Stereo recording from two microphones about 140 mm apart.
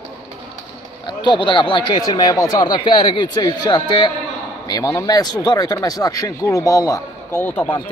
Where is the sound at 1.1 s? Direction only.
35° left (ahead or behind).